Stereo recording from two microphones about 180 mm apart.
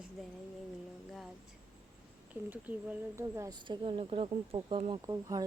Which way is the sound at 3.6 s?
30° right (ahead or behind).